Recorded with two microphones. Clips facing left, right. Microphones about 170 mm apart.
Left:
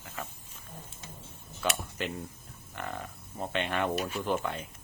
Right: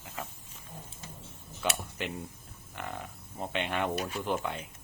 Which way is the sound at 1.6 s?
15° right (ahead or behind).